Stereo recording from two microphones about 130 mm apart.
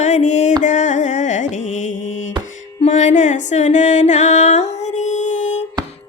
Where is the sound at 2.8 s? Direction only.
65° left (ahead or behind).